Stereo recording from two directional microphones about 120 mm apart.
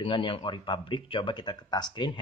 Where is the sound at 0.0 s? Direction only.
45° left (ahead or behind).